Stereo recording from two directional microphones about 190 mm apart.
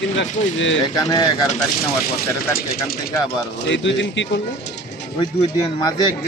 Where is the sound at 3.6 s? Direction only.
70° left (ahead or behind).